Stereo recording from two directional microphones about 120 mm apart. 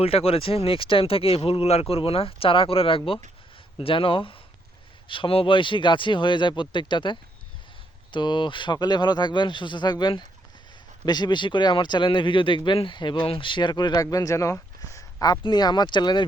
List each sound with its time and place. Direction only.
0.0 s speech: 55° left (ahead or behind); by 16.2 s 40° left (ahead or behind)